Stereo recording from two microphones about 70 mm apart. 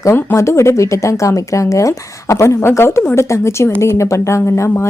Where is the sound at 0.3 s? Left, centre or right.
Left.